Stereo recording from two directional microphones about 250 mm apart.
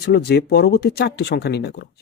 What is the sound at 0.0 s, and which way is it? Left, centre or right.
Speech, left.